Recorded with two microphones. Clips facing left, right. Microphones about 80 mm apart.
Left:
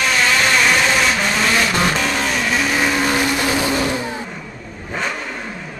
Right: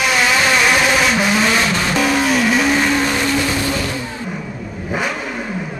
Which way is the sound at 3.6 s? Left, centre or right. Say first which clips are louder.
Left 1 dB; centre.